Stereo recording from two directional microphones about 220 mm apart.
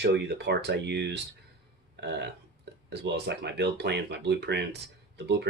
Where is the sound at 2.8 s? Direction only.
50° right (ahead or behind).